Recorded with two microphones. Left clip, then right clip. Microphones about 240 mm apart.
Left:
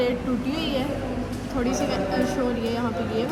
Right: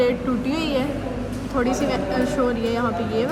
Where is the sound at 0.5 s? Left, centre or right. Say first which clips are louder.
Right 4 dB; centre.